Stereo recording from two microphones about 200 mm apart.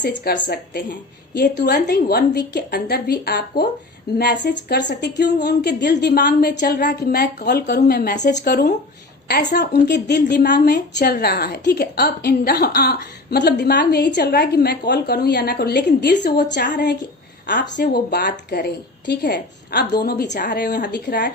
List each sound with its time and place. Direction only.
0.0 s a woman's voice: 60° left (ahead or behind)